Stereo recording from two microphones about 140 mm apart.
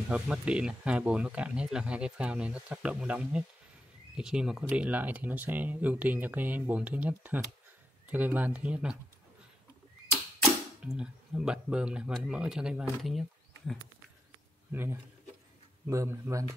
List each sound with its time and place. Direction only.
0.1 s speech: 5° right (ahead or behind)
10.8 s speech: 5° right (ahead or behind)
14.7 s speech: 15° right (ahead or behind)